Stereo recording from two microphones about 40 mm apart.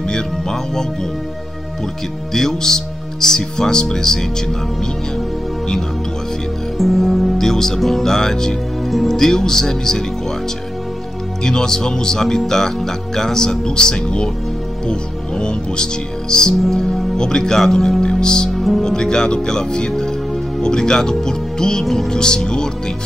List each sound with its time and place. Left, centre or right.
0.1 s speech: centre
2.3 s speech: centre
6.8 s speech: centre
11.4 s speech: centre
18.5 s music: centre
18.8 s speech: centre
21.8 s speech: centre
22.1 s speech: centre